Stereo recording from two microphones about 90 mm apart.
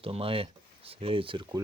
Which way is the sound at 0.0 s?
90° right.